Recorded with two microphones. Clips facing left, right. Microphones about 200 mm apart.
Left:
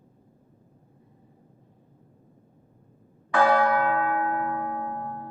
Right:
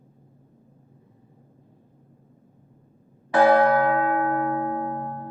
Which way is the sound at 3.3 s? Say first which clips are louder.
Right 4 dB; 30° right (ahead or behind).